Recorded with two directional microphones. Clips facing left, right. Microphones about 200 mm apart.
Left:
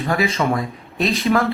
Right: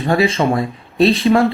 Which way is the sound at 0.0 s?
30° right (ahead or behind).